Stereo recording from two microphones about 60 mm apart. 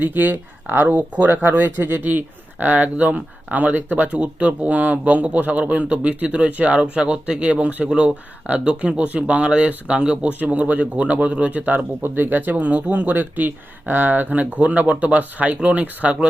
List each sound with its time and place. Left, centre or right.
0.0 s speech: right